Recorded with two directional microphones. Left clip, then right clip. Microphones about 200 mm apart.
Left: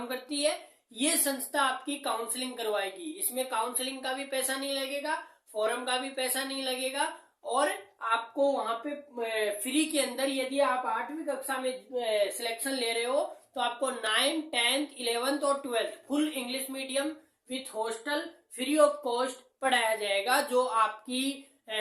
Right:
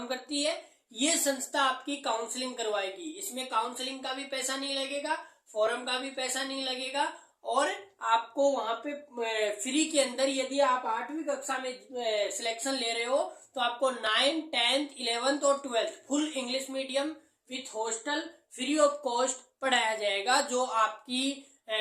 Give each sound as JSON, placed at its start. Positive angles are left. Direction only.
{"t": 0.1, "sound": "a sound", "side_deg": 15}
{"t": 0.9, "sound": "speech", "side_deg": 10}
{"t": 3.3, "sound": "speech", "side_deg": 20}
{"t": 7.4, "sound": "speech", "side_deg": 5}
{"t": 11.9, "sound": "speech", "side_deg": 20}
{"t": 17.5, "sound": "speech", "side_deg": 15}